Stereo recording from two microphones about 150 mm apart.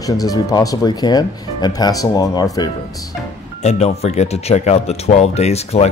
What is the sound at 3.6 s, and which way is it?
Speech, 45° left (ahead or behind).